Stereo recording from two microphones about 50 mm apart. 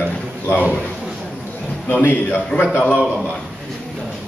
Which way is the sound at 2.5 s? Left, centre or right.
Left.